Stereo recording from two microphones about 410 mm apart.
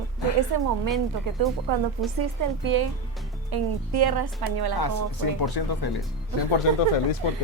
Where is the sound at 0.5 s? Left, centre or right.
Right.